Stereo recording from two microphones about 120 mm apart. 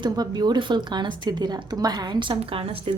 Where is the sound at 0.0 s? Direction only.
35° right (ahead or behind).